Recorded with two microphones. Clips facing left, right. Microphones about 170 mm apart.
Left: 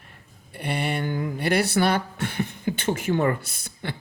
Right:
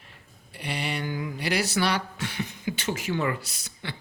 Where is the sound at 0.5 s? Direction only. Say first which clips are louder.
Left 5 dB; 55° left (ahead or behind).